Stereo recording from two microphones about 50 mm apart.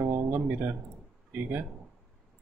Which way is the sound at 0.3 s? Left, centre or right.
Right.